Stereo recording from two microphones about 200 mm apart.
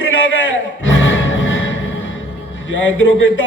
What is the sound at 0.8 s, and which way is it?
Music, 70° left (ahead or behind).